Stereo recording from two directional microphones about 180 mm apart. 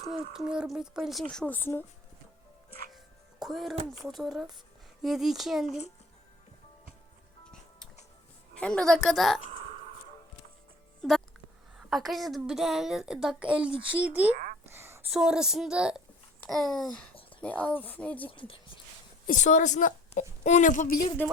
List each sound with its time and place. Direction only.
0.1 s a woman's voice: 5° right (ahead or behind)
3.4 s a woman's voice: centre (ahead or behind)
8.5 s a woman's voice: 5° left (ahead or behind)
11.0 s a woman's voice: 5° left (ahead or behind)
13.7 s a child's voice: 30° right (ahead or behind)
14.0 s speech: 10° right (ahead or behind)
14.7 s a sound: 15° right (ahead or behind)
15.1 s a woman's voice: 5° right (ahead or behind)
18.3 s speech: 30° left (ahead or behind)
19.3 s a woman's voice: 40° left (ahead or behind)